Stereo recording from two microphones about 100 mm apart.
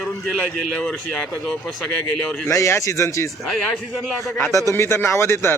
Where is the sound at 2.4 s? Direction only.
25° left (ahead or behind).